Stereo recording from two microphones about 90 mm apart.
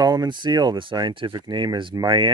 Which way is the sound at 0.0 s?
50° right (ahead or behind).